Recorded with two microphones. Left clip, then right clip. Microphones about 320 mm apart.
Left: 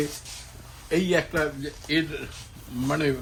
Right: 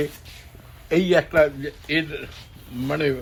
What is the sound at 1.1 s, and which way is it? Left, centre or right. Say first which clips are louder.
Speech: right 8 dB; centre.